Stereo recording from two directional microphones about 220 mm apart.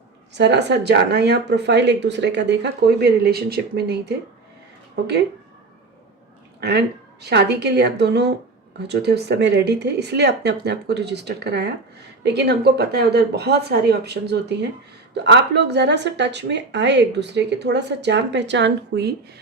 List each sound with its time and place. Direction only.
0.3 s speech: 50° right (ahead or behind)
6.6 s speech: 50° right (ahead or behind)